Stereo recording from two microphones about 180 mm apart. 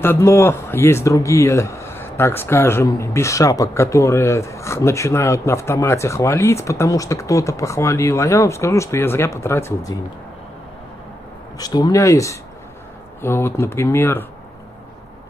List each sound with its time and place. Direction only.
0.0 s speech: 15° left (ahead or behind)
11.5 s speech: 20° left (ahead or behind)